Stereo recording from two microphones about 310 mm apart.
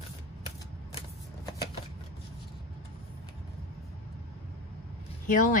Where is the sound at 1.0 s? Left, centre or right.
Centre.